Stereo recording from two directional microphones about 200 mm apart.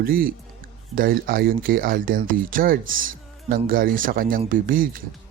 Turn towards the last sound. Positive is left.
turn(degrees=-45)  # may be behind; listen again after turning